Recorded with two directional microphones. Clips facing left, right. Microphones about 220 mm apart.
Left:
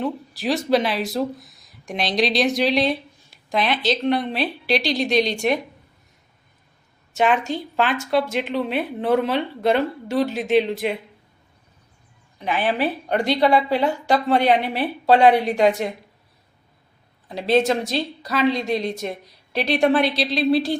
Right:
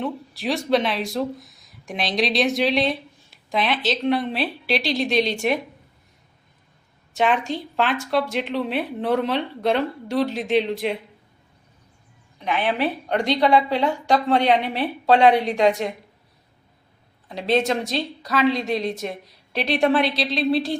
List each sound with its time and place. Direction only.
0.0 s speech: centre (ahead or behind)
7.1 s speech: centre (ahead or behind)
12.5 s speech: 5° left (ahead or behind)
17.2 s speech: centre (ahead or behind)